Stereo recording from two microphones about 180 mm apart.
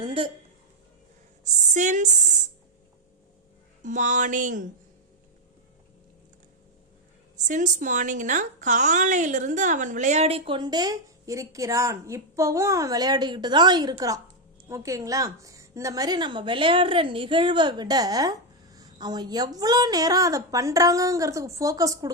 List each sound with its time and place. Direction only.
0.0 s a woman's voice: 30° right (ahead or behind)
1.6 s speech: 45° right (ahead or behind)
3.8 s speech: 45° right (ahead or behind)
7.3 s a woman's voice: 45° right (ahead or behind); by 22.1 s 20° right (ahead or behind)